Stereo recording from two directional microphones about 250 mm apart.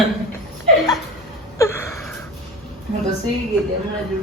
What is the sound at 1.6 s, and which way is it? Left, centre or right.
Gasp, centre.